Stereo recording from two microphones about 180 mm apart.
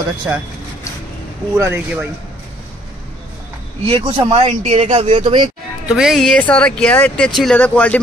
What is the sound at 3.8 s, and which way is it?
Speech, 30° right (ahead or behind).